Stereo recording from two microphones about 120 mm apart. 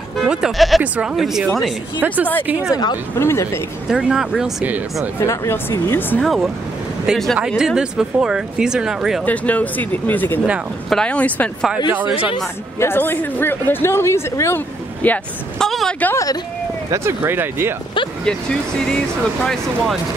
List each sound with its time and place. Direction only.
0.3 s speech: centre (ahead or behind)
2.0 s a woman's voice: 15° right (ahead or behind)
2.7 s speech: 35° left (ahead or behind)
3.2 s speech: 20° left (ahead or behind)
3.9 s speech: 5° right (ahead or behind)
5.2 s speech: 25° left (ahead or behind)
6.2 s speech: centre (ahead or behind)
9.2 s speech: 10° left (ahead or behind)
12.8 s speech: 15° left (ahead or behind)
15.6 s speech: centre (ahead or behind)
16.9 s speech: 20° right (ahead or behind)
19.4 s speech: 5° left (ahead or behind)